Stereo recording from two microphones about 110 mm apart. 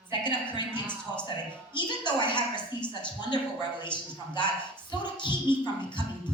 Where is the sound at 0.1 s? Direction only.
45° left (ahead or behind).